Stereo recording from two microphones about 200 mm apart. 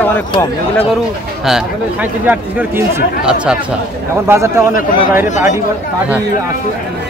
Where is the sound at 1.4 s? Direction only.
5° right (ahead or behind).